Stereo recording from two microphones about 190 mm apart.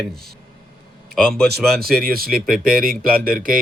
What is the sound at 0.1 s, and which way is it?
A man's voice, centre (ahead or behind).